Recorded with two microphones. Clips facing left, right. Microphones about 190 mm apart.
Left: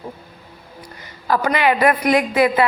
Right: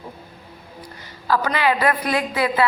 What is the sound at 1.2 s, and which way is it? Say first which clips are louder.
A woman's voice: left 2 dB; 20° left (ahead or behind).